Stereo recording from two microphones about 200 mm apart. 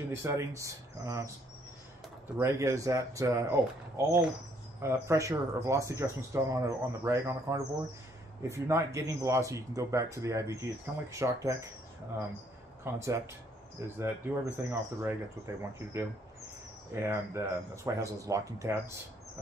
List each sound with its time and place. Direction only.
0.1 s speech: 15° right (ahead or behind)
2.3 s speech: 15° right (ahead or behind)
12.8 s speech: 15° right (ahead or behind)